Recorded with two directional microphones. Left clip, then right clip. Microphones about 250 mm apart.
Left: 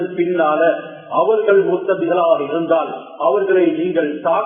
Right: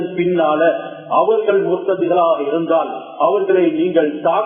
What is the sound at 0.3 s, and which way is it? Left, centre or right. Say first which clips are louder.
A man's voice: even; right.